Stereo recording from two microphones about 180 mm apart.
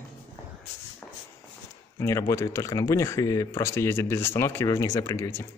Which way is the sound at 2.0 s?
15° left (ahead or behind).